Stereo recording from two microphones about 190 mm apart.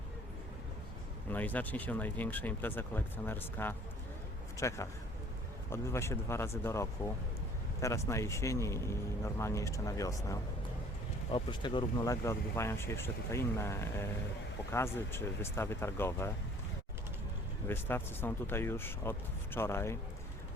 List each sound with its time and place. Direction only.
1.3 s speech: 10° left (ahead or behind)
17.7 s speech: 10° left (ahead or behind)